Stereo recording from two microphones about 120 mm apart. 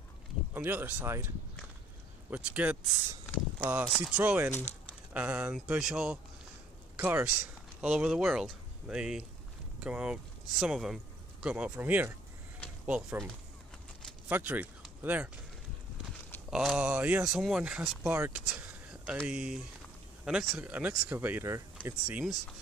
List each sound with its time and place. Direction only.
0.6 s speech: 15° right (ahead or behind)
2.3 s speech: 10° right (ahead or behind)
14.3 s speech: 15° right (ahead or behind)
16.4 s speech: 5° right (ahead or behind)
17.3 s speech: 5° right (ahead or behind)
18.0 s speech: 20° right (ahead or behind)
18.3 s a sound: 5° right (ahead or behind)
19.2 s speech: 5° right (ahead or behind)